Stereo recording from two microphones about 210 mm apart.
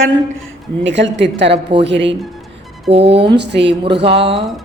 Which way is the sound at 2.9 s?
30° right (ahead or behind).